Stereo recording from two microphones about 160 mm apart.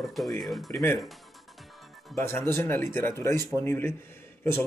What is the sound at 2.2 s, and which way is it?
Speech, 15° left (ahead or behind).